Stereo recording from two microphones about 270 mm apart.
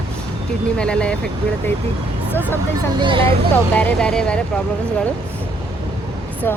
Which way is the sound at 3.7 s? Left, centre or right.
Centre.